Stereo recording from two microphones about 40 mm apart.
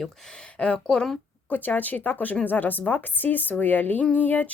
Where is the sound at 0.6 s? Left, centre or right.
Left.